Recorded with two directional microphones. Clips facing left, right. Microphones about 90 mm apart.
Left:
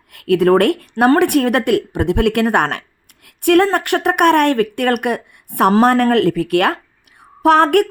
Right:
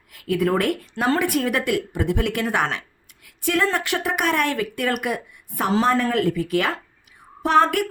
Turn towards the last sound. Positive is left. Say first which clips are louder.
# left 6 dB
turn(degrees=60)  # may be behind; listen again after turning